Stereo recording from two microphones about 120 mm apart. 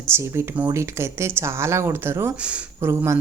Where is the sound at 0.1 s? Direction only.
20° right (ahead or behind).